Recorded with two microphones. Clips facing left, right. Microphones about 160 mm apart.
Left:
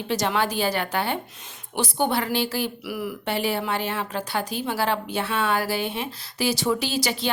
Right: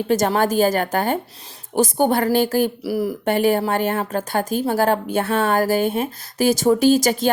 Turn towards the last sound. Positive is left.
turn(degrees=-45)  # may be behind; listen again after turning